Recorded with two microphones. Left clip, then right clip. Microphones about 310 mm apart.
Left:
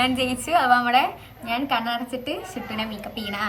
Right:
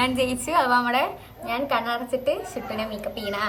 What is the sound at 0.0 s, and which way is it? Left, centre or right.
A woman's voice, centre.